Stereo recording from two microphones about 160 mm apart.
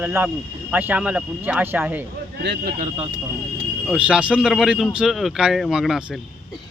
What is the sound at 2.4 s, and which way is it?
Speech, 90° right.